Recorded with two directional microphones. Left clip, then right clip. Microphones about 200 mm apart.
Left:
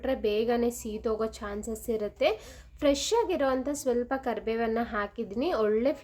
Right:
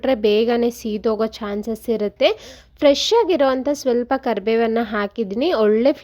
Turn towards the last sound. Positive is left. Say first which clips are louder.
# right 10 dB
turn(degrees=-40)  # may be behind; listen again after turning